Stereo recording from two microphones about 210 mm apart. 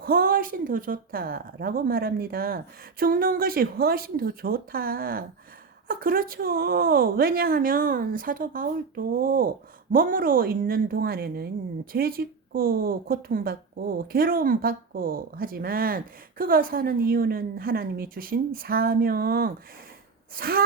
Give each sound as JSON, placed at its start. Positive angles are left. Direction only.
{"t": 0.0, "sound": "a woman's voice", "side_deg": -45}